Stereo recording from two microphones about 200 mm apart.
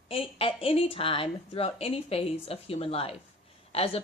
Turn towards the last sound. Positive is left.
turn(degrees=30)  # may be behind; listen again after turning